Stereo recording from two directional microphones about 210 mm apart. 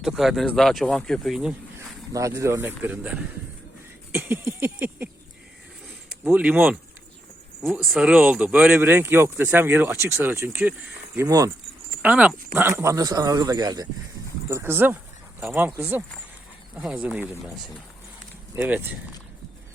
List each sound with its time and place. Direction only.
0.0 s speech: centre (ahead or behind)
2.1 s speech: 15° right (ahead or behind)
6.2 s speech: 5° right (ahead or behind)
18.5 s speech: 10° right (ahead or behind)